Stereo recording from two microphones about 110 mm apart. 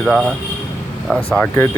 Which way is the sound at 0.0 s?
Centre (ahead or behind).